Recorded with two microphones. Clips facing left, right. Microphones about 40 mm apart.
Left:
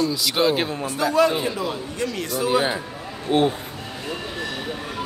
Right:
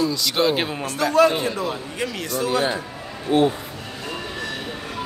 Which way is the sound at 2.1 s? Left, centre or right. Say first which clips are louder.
Left 1 dB; centre.